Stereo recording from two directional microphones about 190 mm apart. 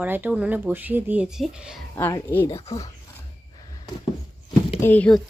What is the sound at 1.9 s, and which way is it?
Speech, 15° left (ahead or behind).